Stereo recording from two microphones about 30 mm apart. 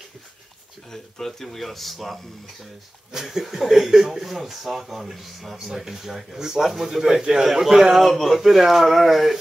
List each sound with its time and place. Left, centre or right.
1.1 s speech: centre
3.1 s speech: right
3.5 s speech: centre
7.6 s speech: centre
8.0 s speech: centre
8.4 s speech: centre